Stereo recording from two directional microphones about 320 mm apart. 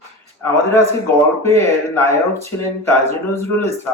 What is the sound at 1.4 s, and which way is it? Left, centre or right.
Speech, centre.